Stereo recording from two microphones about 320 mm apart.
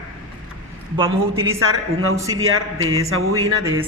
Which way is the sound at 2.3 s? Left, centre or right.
Right.